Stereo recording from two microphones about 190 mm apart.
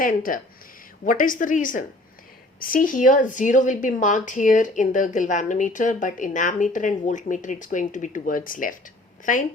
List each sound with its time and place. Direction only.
0.0 s speech: 45° left (ahead or behind)